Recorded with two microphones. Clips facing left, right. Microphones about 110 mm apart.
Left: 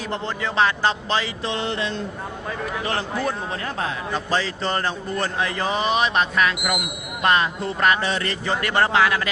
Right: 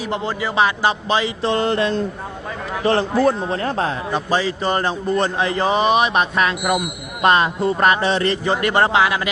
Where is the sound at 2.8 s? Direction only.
35° right (ahead or behind).